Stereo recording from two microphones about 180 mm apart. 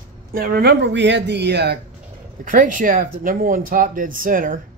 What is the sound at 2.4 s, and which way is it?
Speech, 50° right (ahead or behind).